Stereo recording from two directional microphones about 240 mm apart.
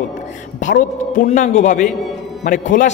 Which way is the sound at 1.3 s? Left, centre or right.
Left.